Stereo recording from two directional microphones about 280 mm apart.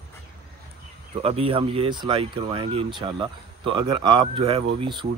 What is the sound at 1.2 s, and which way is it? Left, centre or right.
Speech, centre.